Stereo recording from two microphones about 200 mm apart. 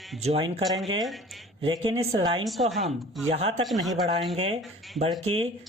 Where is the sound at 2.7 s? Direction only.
Centre (ahead or behind).